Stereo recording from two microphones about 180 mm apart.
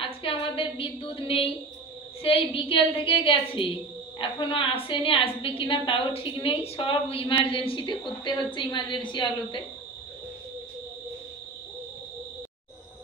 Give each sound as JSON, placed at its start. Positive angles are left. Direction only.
{"t": 0.0, "sound": "a woman's voice", "side_deg": 30}